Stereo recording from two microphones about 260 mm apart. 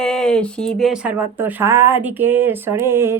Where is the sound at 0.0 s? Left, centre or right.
Centre.